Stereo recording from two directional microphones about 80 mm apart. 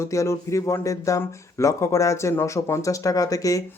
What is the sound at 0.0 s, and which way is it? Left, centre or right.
Speech, left.